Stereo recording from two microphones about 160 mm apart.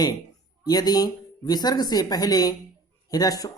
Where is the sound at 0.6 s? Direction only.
25° left (ahead or behind).